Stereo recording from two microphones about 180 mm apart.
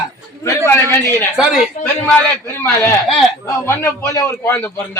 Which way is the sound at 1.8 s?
40° left (ahead or behind).